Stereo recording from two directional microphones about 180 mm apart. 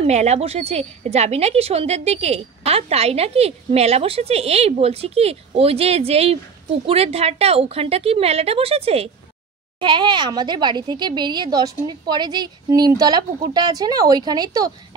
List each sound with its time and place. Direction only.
0.0 s a woman's voice: 40° right (ahead or behind); by 14.7 s 20° right (ahead or behind)